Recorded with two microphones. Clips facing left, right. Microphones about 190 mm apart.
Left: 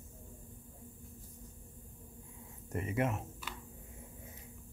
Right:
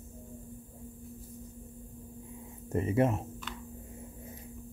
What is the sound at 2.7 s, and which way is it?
Speech, 30° right (ahead or behind).